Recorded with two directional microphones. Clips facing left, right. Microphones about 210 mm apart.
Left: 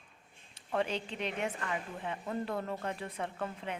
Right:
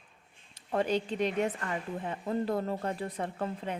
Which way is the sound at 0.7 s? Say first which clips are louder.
Right 5 dB; 40° right (ahead or behind).